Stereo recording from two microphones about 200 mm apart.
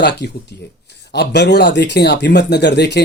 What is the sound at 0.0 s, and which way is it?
Speech, 55° left (ahead or behind).